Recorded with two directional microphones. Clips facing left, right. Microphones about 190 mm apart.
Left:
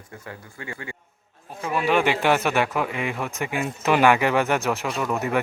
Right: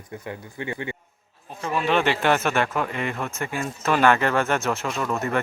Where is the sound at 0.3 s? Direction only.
20° right (ahead or behind).